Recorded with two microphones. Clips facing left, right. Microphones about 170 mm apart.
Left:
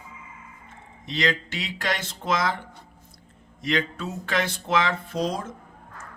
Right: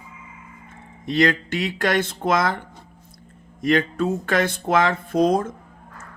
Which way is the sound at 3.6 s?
50° right (ahead or behind).